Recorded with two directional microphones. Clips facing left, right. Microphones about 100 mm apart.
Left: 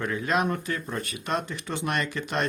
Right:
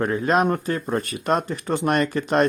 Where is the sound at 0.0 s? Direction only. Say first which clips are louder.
Right 6 dB; 40° right (ahead or behind).